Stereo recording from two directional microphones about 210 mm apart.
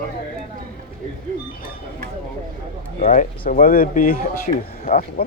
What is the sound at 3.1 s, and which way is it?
Speech, 40° left (ahead or behind).